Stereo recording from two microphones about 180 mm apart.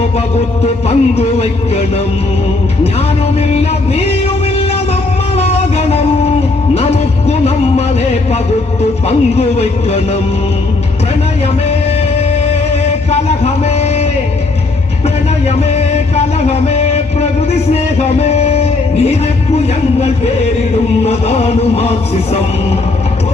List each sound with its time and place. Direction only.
0.6 s music: 35° left (ahead or behind)
3.5 s music: 35° left (ahead or behind)
5.4 s music: 35° left (ahead or behind)
9.0 s music: 35° left (ahead or behind)
12.7 s music: 35° left (ahead or behind)
15.4 s music: 35° left (ahead or behind)
19.5 s a sound: 35° left (ahead or behind)
21.0 s music: 35° left (ahead or behind)